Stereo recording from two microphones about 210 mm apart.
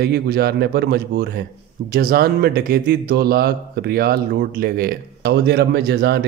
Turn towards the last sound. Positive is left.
turn(degrees=-50)  # may be behind; listen again after turning